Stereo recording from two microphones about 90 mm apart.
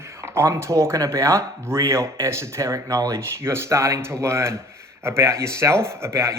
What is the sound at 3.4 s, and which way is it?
Speech, 30° right (ahead or behind).